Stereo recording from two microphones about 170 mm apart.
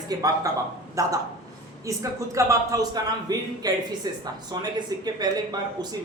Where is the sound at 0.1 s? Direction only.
20° right (ahead or behind).